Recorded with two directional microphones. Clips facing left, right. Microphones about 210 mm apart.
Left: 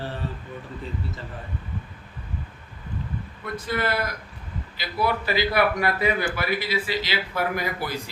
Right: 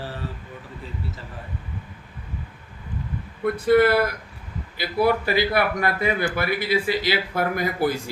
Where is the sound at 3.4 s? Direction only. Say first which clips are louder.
Right 11 dB; 55° right (ahead or behind).